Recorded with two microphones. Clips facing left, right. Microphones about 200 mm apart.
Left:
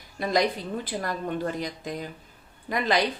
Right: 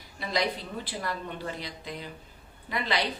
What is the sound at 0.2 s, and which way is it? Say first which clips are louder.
A woman's voice: left 5 dB; 45° left (ahead or behind).